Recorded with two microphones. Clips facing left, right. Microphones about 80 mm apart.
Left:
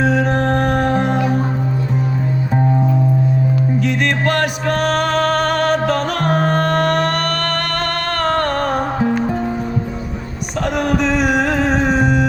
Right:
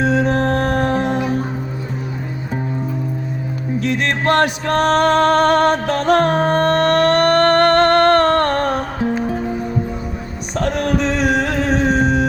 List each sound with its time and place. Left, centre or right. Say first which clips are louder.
0.3 s music: even; left
4.4 s music: right 2 dB; right
11.3 s a sound: left 1 dB; left